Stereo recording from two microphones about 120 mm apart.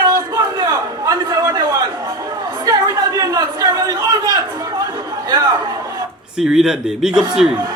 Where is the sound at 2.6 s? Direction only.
30° right (ahead or behind).